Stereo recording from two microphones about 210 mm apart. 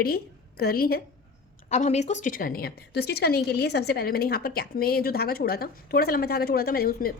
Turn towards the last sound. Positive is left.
turn(degrees=45)  # may be behind; listen again after turning